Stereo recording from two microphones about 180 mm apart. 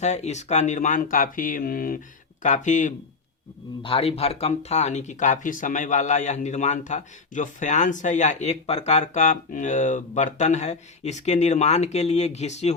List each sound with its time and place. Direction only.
0.0 s speech: 40° left (ahead or behind)
3.8 s speech: 35° left (ahead or behind)